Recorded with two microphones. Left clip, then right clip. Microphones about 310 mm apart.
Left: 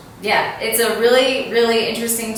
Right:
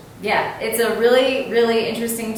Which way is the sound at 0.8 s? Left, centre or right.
Centre.